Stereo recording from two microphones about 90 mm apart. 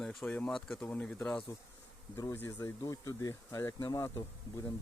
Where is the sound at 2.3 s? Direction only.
25° left (ahead or behind).